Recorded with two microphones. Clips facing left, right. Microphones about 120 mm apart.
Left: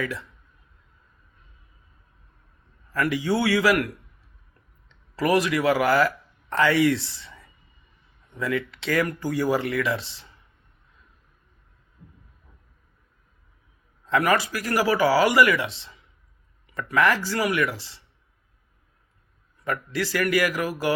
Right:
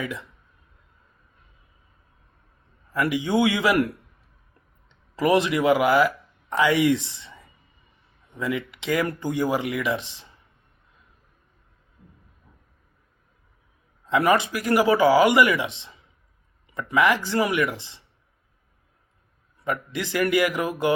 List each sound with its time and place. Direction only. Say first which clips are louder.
0.0 s speech: left 1 dB; 15° right (ahead or behind)
2.9 s a man's voice: right 1 dB; 15° right (ahead or behind)
14.1 s speech: right 2 dB; 20° right (ahead or behind)
19.6 s speech: left 1 dB; 20° right (ahead or behind)